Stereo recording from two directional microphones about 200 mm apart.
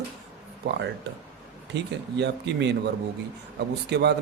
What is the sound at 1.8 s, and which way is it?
Speech, 60° right (ahead or behind).